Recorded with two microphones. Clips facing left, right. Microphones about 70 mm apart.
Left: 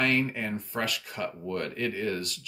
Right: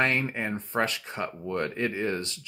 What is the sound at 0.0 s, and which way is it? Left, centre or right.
Speech, right.